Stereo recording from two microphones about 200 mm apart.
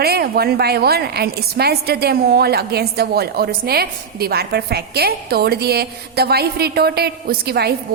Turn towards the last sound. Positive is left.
turn(degrees=-50)  # may be behind; listen again after turning